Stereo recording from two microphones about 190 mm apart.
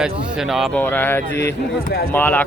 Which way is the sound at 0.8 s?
10° left (ahead or behind).